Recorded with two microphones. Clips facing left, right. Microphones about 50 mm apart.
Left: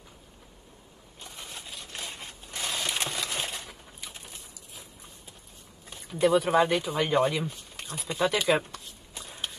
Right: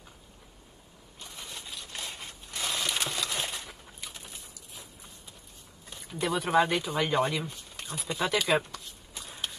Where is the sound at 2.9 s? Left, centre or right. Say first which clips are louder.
Even; centre.